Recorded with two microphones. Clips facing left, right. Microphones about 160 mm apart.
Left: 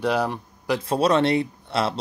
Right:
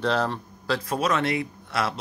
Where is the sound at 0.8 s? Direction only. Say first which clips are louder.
Left 6 dB; 30° left (ahead or behind).